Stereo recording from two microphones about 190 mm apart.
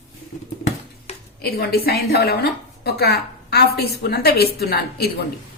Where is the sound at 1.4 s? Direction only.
55° left (ahead or behind).